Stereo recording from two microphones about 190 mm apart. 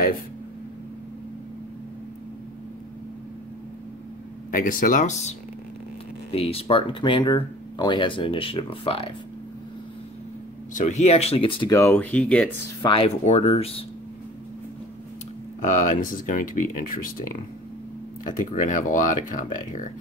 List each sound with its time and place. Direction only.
4.5 s speech: 45° left (ahead or behind)
6.3 s speech: 30° left (ahead or behind)
10.7 s speech: 40° left (ahead or behind); by 12.4 s 5° left (ahead or behind)
12.8 s speech: 30° left (ahead or behind)
15.6 s speech: 45° left (ahead or behind)